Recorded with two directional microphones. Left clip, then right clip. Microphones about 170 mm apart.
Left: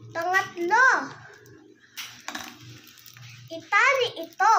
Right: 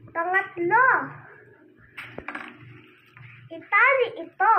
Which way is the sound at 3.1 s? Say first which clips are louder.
Left 2 dB; 25° left (ahead or behind).